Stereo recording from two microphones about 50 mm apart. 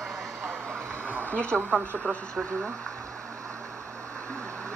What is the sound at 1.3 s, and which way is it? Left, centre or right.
Speech, left.